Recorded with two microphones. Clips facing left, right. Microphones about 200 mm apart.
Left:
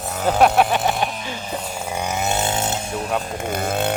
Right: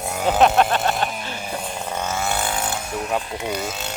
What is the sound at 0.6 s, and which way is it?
Speech, 15° left (ahead or behind).